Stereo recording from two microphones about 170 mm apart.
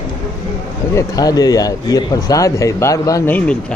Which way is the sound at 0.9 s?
20° left (ahead or behind).